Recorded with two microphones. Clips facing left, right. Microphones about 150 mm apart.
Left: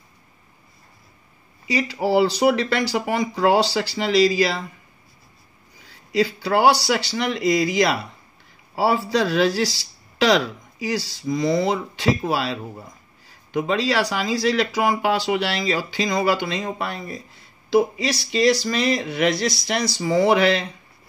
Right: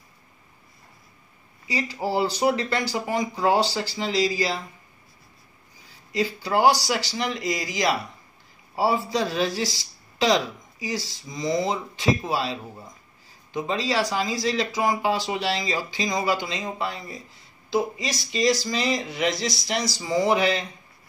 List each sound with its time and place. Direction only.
1.7 s speech: 75° left (ahead or behind)
6.1 s speech: 75° left (ahead or behind)
8.7 s speech: 80° left